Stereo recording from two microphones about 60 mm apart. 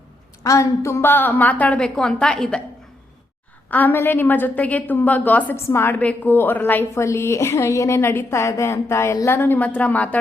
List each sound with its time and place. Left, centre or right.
0.4 s a woman's voice: left
1.0 s a woman's voice: left
1.8 s a woman's voice: centre
3.7 s a woman's voice: left
5.5 s a woman's voice: left
6.9 s a woman's voice: left
9.2 s a woman's voice: left
9.6 s a woman's voice: left